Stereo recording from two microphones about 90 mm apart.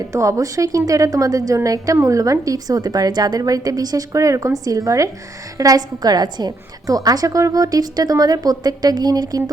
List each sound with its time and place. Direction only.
0.1 s a woman's voice: 35° right (ahead or behind)